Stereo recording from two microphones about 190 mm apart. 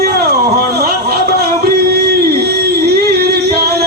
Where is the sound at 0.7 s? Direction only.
55° right (ahead or behind).